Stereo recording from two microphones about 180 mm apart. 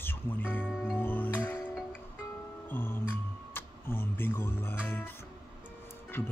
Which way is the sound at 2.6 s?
10° left (ahead or behind).